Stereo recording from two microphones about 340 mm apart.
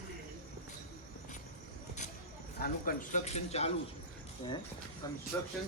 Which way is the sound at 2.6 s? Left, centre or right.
Left.